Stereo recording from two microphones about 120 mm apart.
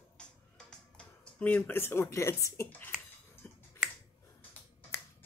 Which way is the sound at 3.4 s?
10° left (ahead or behind).